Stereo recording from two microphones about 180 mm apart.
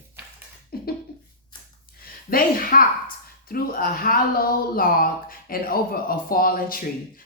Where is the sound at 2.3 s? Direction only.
55° left (ahead or behind).